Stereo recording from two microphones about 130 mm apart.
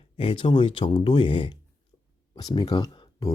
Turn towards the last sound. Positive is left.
turn(degrees=30)  # may be behind; listen again after turning